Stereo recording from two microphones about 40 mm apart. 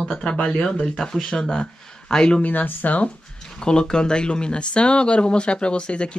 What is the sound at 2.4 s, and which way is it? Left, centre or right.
Speech, left.